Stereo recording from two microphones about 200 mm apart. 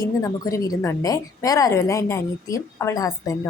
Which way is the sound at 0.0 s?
15° left (ahead or behind).